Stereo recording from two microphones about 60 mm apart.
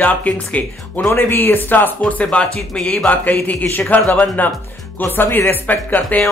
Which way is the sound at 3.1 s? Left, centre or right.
Left.